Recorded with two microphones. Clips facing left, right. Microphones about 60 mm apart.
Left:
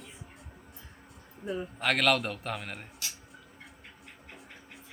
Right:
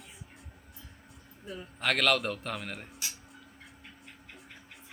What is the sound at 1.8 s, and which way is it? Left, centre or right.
Speech, centre.